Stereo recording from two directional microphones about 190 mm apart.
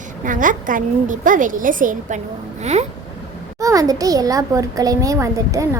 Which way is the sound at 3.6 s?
15° right (ahead or behind).